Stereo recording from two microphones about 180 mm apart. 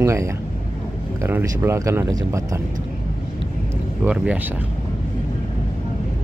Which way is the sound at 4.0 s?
5° right (ahead or behind).